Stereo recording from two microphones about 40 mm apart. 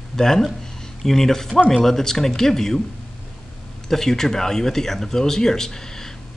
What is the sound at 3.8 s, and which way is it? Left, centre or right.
Speech, centre.